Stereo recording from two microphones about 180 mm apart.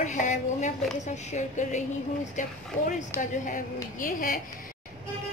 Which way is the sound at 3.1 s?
10° left (ahead or behind).